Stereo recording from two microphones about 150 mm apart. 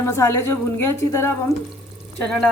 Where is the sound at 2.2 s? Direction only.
5° left (ahead or behind).